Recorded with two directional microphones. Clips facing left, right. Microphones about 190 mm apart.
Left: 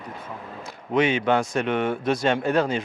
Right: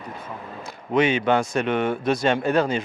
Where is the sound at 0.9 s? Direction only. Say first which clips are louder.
Right 1 dB; 10° right (ahead or behind).